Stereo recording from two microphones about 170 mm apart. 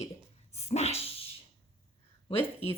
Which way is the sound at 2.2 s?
35° left (ahead or behind).